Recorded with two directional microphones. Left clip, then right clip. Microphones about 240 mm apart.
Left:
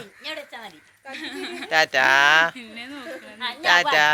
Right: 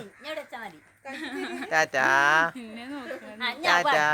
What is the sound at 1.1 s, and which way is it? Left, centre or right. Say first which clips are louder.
Speech: left 2 dB; right.